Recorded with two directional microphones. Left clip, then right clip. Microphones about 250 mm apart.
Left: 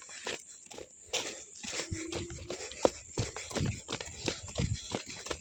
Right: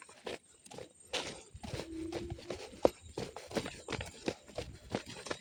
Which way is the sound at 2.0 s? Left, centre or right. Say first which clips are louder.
Left 2 dB; left.